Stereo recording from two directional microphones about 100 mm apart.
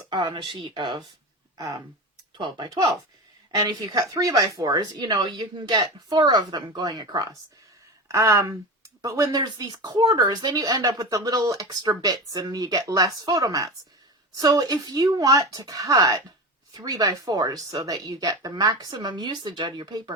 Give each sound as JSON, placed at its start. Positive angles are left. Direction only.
{"t": 0.1, "sound": "speech", "side_deg": -50}
{"t": 1.5, "sound": "speech", "side_deg": -35}
{"t": 2.4, "sound": "speech", "side_deg": -45}
{"t": 8.0, "sound": "speech", "side_deg": -30}